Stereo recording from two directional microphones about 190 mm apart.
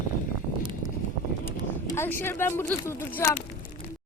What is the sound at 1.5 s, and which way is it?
Speech, 10° left (ahead or behind).